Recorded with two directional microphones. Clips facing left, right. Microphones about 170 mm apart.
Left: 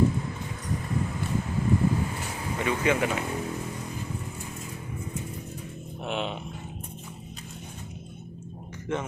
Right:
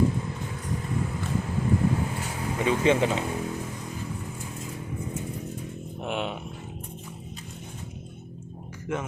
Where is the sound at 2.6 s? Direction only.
25° right (ahead or behind).